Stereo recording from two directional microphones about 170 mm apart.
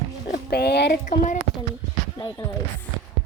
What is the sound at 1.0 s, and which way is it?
Speech, 50° left (ahead or behind).